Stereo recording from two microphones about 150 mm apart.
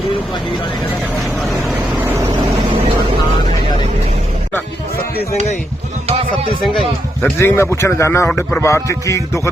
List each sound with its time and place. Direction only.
1.4 s vehicle: centre (ahead or behind)
7.2 s speech: 15° left (ahead or behind)